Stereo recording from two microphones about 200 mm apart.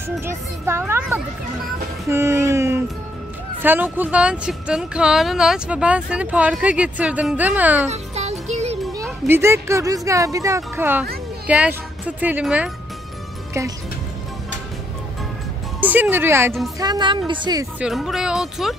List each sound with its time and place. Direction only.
0.2 s speech: 10° right (ahead or behind)
2.0 s a sound: 15° right (ahead or behind)
3.6 s speech: 10° right (ahead or behind)
7.9 s music: 35° right (ahead or behind)
9.3 s speech: 10° right (ahead or behind)
15.8 s speech: 10° right (ahead or behind)
17.7 s speech: 5° right (ahead or behind)